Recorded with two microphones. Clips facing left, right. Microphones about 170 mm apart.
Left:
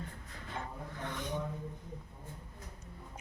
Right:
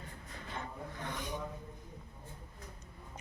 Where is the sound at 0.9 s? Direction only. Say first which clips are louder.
Left 3 dB; 15° right (ahead or behind).